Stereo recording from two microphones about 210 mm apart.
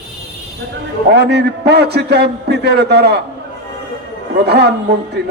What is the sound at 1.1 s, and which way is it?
A man's voice, 50° right (ahead or behind).